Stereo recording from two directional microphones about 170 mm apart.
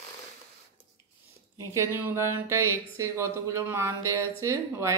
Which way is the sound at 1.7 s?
15° right (ahead or behind).